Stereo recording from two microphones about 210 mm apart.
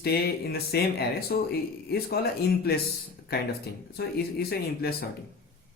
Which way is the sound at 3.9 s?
50° left (ahead or behind).